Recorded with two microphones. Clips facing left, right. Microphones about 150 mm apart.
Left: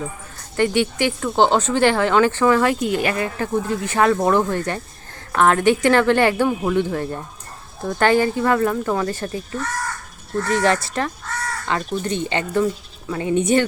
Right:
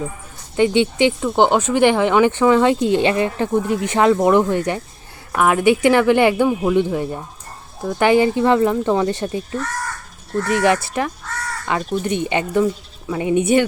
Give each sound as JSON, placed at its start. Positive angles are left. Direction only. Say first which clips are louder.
{"t": 0.5, "sound": "speech", "louder": "right 3 dB", "side_deg": -20}
{"t": 12.0, "sound": "speech", "louder": "right 3 dB", "side_deg": -15}